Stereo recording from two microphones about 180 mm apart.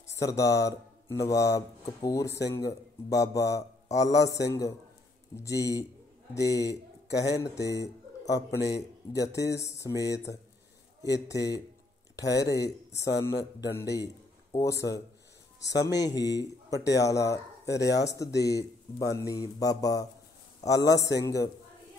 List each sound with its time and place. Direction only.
0.0 s a man's voice: 15° left (ahead or behind)
16.0 s a man's voice: 20° left (ahead or behind)